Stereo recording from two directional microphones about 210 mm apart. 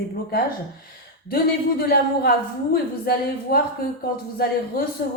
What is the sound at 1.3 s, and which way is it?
Speech, 45° left (ahead or behind).